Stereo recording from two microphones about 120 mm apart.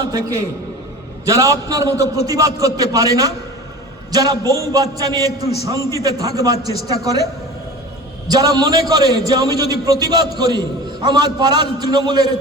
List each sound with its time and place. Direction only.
1.2 s a man's voice: 30° right (ahead or behind)
8.3 s a man's voice: 30° right (ahead or behind)